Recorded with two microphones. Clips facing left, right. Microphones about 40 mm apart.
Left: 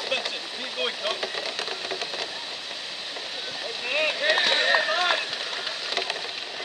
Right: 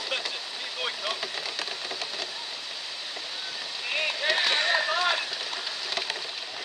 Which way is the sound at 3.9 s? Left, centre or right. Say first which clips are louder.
Left 4 dB; centre.